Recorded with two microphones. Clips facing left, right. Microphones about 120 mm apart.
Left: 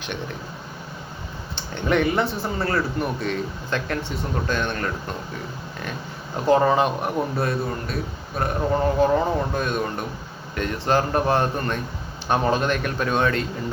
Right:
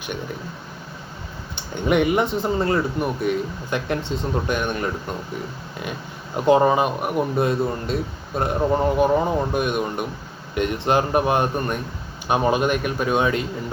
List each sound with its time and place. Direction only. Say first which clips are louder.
1.5 s speech: right 2 dB; 15° right (ahead or behind)
6.3 s a man's voice: right 2 dB; 20° right (ahead or behind)
6.7 s speech: even; 10° right (ahead or behind)
7.3 s a man's voice: right 4 dB; 20° right (ahead or behind)